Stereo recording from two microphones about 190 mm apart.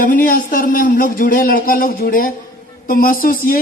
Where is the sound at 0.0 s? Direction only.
45° left (ahead or behind).